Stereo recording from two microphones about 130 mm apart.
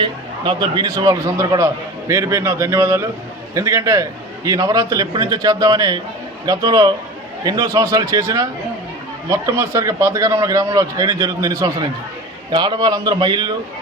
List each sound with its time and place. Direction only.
0.0 s a man's voice: 40° right (ahead or behind)